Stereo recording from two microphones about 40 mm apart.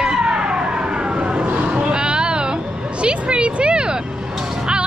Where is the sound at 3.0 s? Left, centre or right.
Right.